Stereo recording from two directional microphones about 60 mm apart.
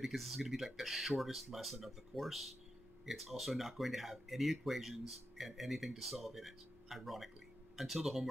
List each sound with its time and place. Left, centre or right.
0.0 s speech: centre